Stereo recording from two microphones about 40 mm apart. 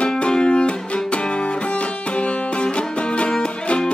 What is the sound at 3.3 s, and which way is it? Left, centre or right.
Music, left.